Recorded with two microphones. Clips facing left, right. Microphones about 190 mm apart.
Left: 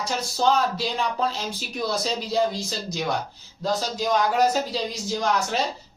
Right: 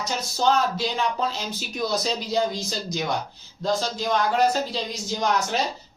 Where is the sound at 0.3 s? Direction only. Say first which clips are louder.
Even; centre (ahead or behind).